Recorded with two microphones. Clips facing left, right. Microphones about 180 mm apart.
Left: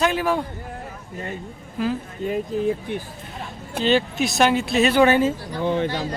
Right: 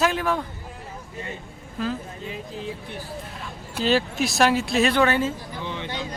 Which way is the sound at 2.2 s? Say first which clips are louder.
Left 15 dB; 50° left (ahead or behind).